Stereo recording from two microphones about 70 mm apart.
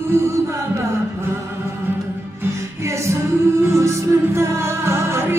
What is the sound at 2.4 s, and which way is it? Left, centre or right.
Music, right.